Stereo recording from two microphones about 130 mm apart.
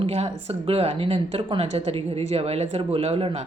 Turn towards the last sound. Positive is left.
turn(degrees=-45)  # may be behind; listen again after turning